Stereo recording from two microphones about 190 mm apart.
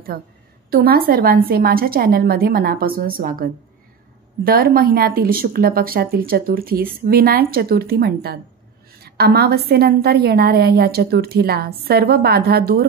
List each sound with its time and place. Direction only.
0.1 s speech: 55° right (ahead or behind)
4.5 s a woman's voice: 50° right (ahead or behind)